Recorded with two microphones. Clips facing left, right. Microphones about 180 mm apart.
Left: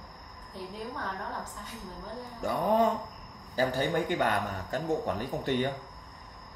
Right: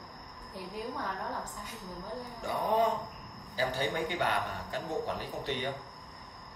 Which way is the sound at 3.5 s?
50° left (ahead or behind).